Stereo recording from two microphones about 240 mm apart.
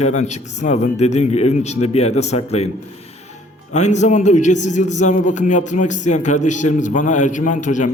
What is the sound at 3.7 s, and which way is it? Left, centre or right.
A man's voice, left.